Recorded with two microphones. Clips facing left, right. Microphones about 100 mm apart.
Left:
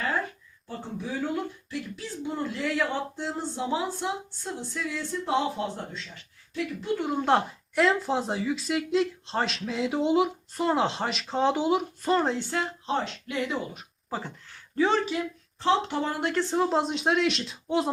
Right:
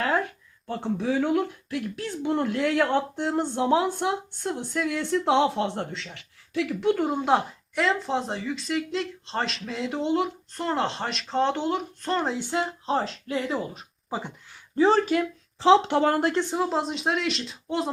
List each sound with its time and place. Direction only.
0.9 s speech: 80° right
7.2 s speech: centre (ahead or behind)
12.5 s a woman's voice: 35° right (ahead or behind)
14.1 s speech: 15° right (ahead or behind)
14.8 s a woman's voice: 35° right (ahead or behind)
15.0 s speech: 50° right (ahead or behind)
15.5 s speech: 90° right
16.4 s speech: 5° right (ahead or behind)